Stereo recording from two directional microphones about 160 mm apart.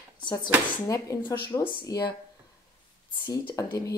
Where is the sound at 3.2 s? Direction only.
25° left (ahead or behind).